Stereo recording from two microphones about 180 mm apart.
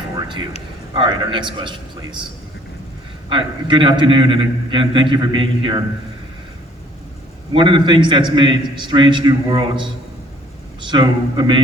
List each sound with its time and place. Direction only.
0.2 s a sound: 25° right (ahead or behind)
0.9 s a man's voice: 25° right (ahead or behind)
3.2 s a man's voice: 25° right (ahead or behind)
7.5 s a man's voice: 25° right (ahead or behind)